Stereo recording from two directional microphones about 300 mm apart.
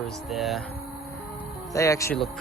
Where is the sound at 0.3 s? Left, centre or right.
Centre.